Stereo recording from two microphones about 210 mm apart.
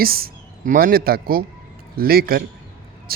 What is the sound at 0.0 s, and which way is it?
Speech, 45° right (ahead or behind).